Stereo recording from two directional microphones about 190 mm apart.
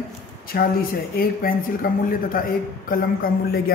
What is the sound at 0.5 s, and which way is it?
A woman's voice, 50° left (ahead or behind).